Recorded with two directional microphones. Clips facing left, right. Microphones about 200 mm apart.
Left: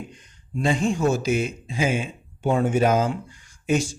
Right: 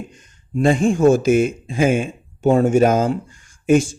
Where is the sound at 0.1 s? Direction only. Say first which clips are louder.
Right 7 dB; 50° right (ahead or behind).